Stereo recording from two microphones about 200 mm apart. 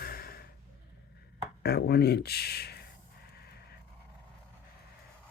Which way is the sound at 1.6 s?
50° left (ahead or behind).